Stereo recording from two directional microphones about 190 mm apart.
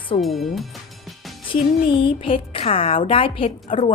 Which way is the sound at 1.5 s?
25° left (ahead or behind).